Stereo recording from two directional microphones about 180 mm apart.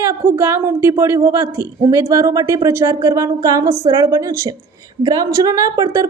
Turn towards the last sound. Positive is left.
turn(degrees=-20)  # may be behind; listen again after turning